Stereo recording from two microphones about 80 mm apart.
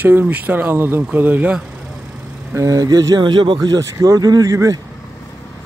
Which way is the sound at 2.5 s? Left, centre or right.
Right.